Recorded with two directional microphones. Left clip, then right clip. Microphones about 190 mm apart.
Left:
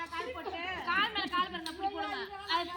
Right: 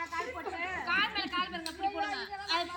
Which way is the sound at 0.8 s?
30° right (ahead or behind).